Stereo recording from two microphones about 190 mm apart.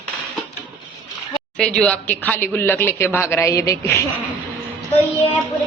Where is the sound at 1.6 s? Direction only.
5° left (ahead or behind).